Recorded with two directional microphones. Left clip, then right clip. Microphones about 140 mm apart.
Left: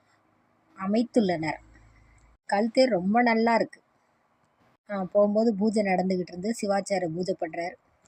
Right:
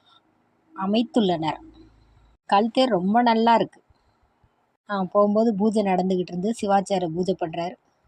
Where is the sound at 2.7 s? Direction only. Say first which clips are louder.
Right 2 dB; centre (ahead or behind).